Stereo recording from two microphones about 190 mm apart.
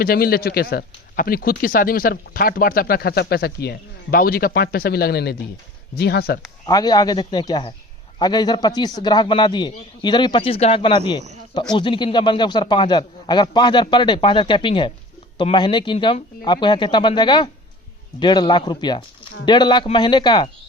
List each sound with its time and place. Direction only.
0.0 s speech: 50° left (ahead or behind)
6.7 s a man's voice: 20° left (ahead or behind)